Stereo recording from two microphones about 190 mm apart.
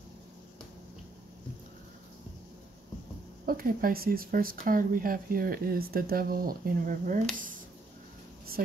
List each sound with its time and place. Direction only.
3.4 s speech: 50° right (ahead or behind)